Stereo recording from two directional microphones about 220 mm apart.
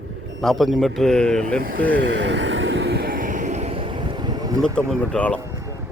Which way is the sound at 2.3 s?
55° right (ahead or behind).